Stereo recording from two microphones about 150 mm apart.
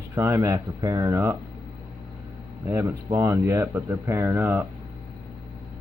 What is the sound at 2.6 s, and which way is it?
Speech, 20° right (ahead or behind).